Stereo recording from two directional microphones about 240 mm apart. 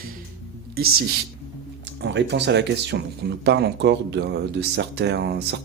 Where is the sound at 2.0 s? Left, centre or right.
Right.